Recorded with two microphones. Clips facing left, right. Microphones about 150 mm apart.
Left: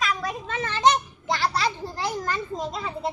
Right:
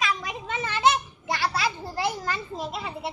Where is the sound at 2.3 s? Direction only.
5° right (ahead or behind).